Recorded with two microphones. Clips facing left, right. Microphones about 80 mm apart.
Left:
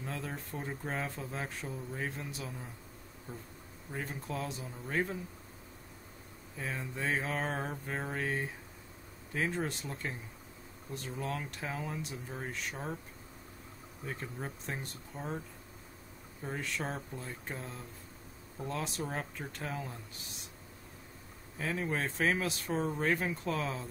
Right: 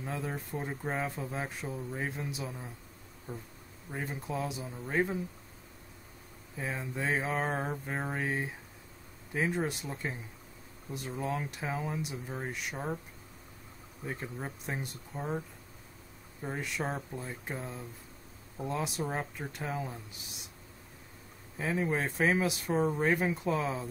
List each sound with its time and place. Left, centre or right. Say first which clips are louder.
0.0 s speech: right 3 dB; centre
3.3 s bee: right 4 dB; right
3.9 s speech: right 2 dB; centre
6.5 s speech: right 3 dB; centre
14.0 s speech: right 2 dB; centre
16.4 s speech: right 2 dB; centre
21.5 s speech: right 3 dB; centre